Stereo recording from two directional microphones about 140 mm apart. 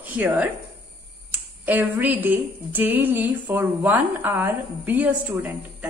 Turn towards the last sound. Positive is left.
turn(degrees=-10)  # may be behind; listen again after turning